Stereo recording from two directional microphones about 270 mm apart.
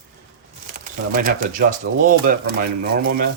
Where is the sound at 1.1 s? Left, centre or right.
Right.